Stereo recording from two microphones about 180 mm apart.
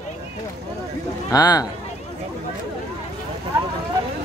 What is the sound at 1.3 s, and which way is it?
Speech, 20° left (ahead or behind).